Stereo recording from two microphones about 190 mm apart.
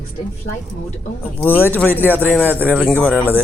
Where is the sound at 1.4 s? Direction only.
10° left (ahead or behind).